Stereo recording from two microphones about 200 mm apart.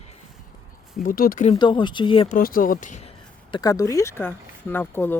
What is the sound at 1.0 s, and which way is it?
Speech, 45° left (ahead or behind).